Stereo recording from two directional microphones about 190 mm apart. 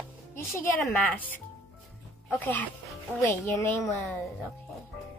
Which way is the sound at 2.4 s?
10° left (ahead or behind).